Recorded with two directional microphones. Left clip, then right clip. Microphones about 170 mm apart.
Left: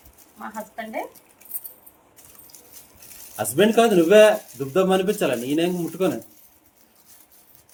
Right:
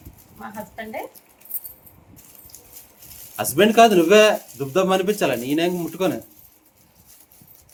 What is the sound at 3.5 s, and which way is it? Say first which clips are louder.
Speech: right 3 dB; 10° right (ahead or behind).